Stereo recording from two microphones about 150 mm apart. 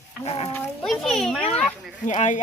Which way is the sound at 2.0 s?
55° left (ahead or behind).